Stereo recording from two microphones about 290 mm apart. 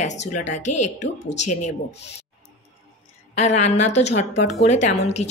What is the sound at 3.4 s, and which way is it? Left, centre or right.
A woman's voice, left.